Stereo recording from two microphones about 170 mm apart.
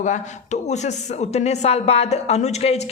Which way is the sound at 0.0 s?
45° left (ahead or behind).